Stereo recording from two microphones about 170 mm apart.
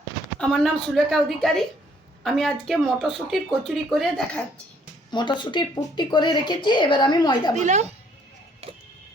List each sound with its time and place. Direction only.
0.3 s speech: 5° left (ahead or behind)
5.1 s speech: 25° left (ahead or behind)
7.5 s a woman's voice: 45° right (ahead or behind)